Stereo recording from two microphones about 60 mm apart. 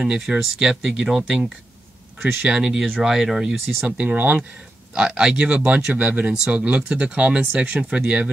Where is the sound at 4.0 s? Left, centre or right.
Right.